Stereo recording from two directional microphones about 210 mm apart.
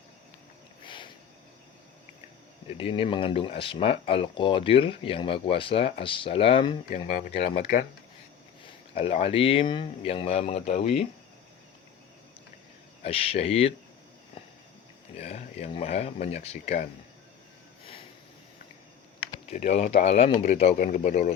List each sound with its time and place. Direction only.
0.9 s a sound: 25° left (ahead or behind)
2.6 s a man's voice: 25° left (ahead or behind); by 7.9 s 40° left (ahead or behind)
8.6 s speech: 30° left (ahead or behind)
13.1 s speech: 30° left (ahead or behind)
15.2 s speech: 30° left (ahead or behind)
19.5 s a man's voice: 35° left (ahead or behind)